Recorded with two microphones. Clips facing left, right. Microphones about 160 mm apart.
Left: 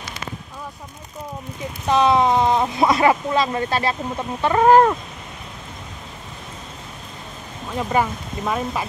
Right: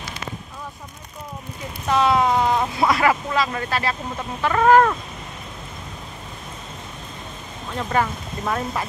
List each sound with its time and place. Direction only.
1.9 s speech: 20° left (ahead or behind)
7.7 s speech: 10° left (ahead or behind)